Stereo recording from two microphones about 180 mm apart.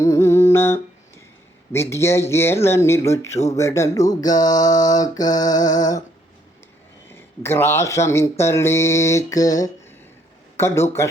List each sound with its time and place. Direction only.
0.0 s humming: 15° left (ahead or behind)
1.7 s speech: 15° left (ahead or behind)
4.1 s music: 20° left (ahead or behind)
7.1 s speech: 15° left (ahead or behind)